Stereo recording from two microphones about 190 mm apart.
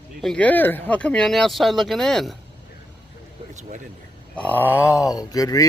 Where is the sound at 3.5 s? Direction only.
40° right (ahead or behind).